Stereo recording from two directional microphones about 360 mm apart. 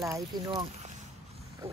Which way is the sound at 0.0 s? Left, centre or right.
Centre.